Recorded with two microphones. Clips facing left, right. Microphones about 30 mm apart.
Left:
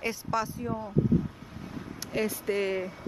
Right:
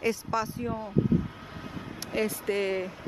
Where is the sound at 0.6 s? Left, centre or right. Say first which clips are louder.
Right 1 dB; centre.